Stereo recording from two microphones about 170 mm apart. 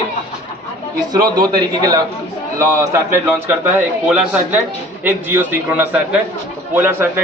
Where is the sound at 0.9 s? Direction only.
25° right (ahead or behind).